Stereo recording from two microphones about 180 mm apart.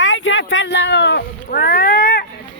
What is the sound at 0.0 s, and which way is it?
Cat, 90° left.